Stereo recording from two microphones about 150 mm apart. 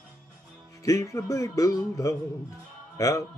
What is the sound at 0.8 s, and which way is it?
Speech, 20° left (ahead or behind).